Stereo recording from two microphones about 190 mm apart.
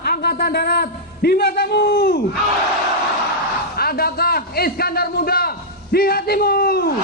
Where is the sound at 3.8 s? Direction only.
55° left (ahead or behind).